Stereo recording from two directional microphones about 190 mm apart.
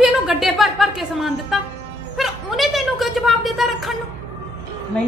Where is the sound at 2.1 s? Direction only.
Centre (ahead or behind).